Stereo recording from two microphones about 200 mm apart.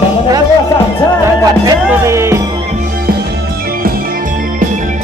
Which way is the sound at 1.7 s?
15° right (ahead or behind).